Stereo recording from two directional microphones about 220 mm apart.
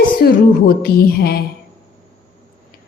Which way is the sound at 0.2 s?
45° left (ahead or behind).